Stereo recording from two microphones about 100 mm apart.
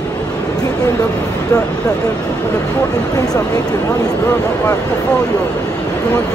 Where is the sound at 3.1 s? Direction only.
40° left (ahead or behind).